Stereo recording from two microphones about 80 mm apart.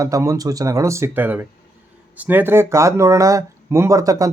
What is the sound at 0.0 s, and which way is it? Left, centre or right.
Speech, right.